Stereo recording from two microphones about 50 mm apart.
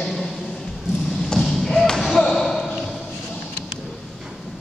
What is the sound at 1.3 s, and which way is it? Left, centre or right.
Basketball bounce, centre.